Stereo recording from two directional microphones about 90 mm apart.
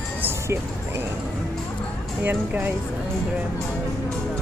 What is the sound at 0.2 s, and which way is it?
Music, 25° right (ahead or behind).